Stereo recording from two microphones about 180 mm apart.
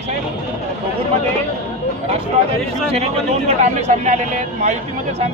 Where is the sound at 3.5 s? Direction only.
40° right (ahead or behind).